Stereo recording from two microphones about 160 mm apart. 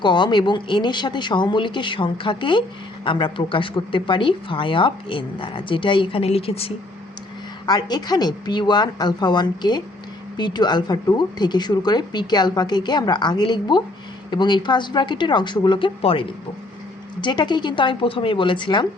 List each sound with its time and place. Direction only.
0.0 s speech: 30° left (ahead or behind)
7.7 s speech: 25° left (ahead or behind)